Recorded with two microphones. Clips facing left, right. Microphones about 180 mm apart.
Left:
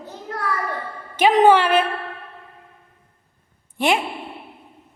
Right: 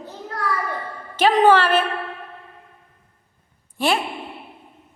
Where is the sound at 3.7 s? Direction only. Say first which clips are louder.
Left 1 dB; 20° left (ahead or behind).